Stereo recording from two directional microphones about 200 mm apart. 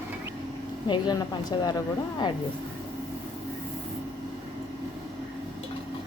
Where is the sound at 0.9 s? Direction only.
20° left (ahead or behind).